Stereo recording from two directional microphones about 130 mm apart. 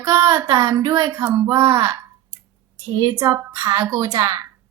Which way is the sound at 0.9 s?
20° right (ahead or behind).